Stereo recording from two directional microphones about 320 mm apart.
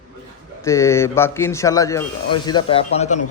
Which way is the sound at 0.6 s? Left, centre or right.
Centre.